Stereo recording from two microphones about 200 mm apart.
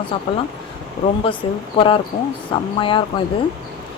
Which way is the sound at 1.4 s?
25° left (ahead or behind).